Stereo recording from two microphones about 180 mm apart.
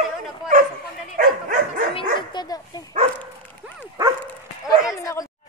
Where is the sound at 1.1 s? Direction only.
50° right (ahead or behind).